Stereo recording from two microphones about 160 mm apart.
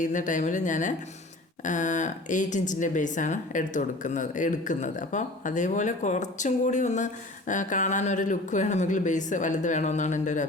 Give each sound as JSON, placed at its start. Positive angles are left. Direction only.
{"t": 0.0, "sound": "speech", "side_deg": 50}